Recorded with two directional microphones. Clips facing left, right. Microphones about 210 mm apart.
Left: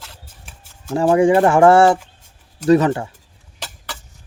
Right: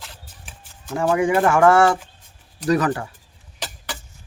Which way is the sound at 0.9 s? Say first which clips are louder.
Left 5 dB; 30° left (ahead or behind).